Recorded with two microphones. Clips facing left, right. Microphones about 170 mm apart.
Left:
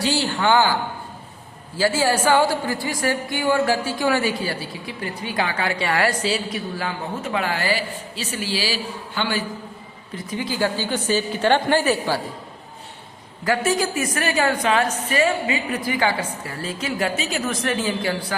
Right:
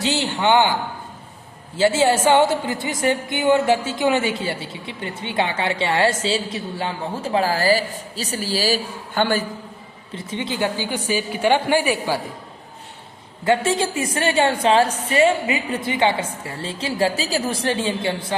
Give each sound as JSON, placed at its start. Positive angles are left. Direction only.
{"t": 0.0, "sound": "a woman's voice", "side_deg": -20}
{"t": 10.2, "sound": "a woman's voice", "side_deg": -25}
{"t": 13.4, "sound": "a woman's voice", "side_deg": -25}